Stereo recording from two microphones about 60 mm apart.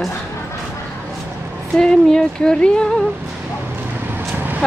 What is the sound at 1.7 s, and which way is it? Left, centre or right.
Speech, centre.